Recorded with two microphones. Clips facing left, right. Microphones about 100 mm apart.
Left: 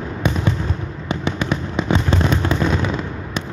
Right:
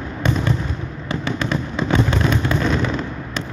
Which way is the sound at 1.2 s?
20° left (ahead or behind).